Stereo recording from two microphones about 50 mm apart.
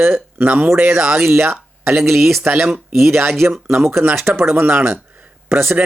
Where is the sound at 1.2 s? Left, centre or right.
Right.